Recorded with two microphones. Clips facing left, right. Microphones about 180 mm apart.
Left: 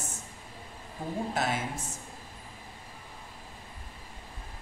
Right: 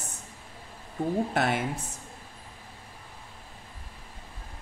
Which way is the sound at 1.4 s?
60° right (ahead or behind).